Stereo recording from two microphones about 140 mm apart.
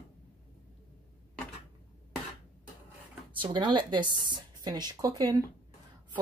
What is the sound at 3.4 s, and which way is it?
Speech, 35° right (ahead or behind).